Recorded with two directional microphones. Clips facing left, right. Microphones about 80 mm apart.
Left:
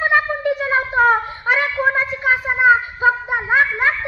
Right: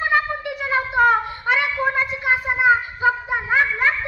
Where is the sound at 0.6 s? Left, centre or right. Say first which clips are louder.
Even; left.